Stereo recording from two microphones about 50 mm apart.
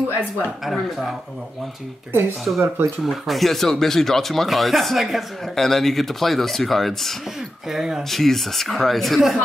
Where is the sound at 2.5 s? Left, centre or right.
Right.